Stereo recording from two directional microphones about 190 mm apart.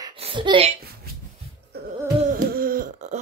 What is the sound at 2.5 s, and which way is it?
Throat clearing, 50° right (ahead or behind).